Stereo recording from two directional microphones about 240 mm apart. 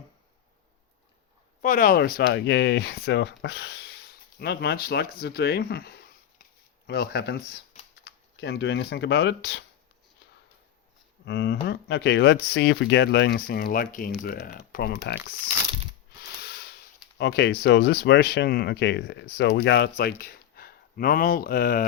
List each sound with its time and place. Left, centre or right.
1.6 s speech: left
6.4 s a sound: left
8.0 s speech: left
11.3 s speech: left
15.2 s speech: centre
16.4 s a sound: left
17.2 s speech: left